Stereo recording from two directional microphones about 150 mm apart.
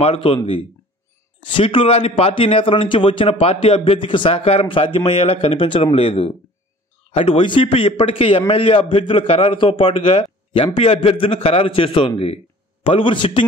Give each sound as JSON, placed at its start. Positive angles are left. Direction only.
{"t": 0.0, "sound": "a man's voice", "side_deg": 40}
{"t": 1.6, "sound": "a man's voice", "side_deg": 40}